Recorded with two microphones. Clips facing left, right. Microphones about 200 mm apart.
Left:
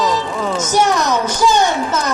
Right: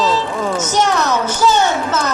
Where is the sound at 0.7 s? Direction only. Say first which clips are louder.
Left 2 dB; 10° left (ahead or behind).